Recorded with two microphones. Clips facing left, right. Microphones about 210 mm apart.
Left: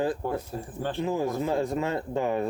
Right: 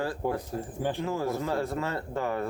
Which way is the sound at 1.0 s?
15° left (ahead or behind).